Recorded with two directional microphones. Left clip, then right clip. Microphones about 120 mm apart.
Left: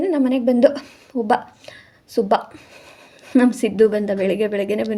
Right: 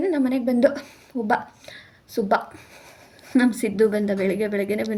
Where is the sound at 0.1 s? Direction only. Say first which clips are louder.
Left 4 dB; 15° left (ahead or behind).